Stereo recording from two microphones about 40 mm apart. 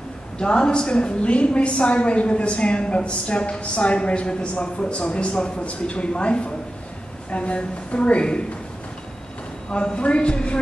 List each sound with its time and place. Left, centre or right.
0.4 s a woman's voice: left
9.7 s a woman's voice: left